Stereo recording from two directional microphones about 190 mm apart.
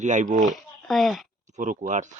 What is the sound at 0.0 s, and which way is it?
Speech, 40° right (ahead or behind).